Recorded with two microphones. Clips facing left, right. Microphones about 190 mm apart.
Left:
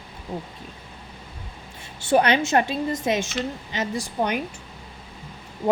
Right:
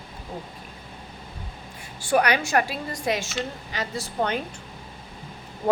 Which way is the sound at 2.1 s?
25° left (ahead or behind).